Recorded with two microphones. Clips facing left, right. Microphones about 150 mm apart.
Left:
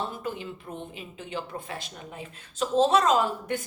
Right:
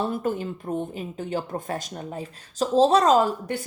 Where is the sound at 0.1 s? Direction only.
45° right (ahead or behind).